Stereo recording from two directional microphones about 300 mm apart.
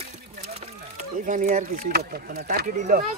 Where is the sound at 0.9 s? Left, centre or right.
Right.